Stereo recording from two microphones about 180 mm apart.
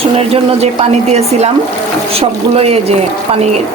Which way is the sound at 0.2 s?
35° right (ahead or behind).